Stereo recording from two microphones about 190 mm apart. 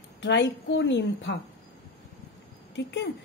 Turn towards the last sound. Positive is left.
turn(degrees=65)  # may be behind; listen again after turning